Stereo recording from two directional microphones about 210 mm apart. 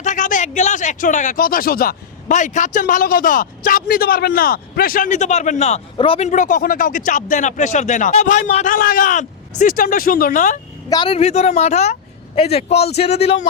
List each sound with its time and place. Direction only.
0.0 s speech: 35° left (ahead or behind)
10.8 s a man's voice: 20° left (ahead or behind)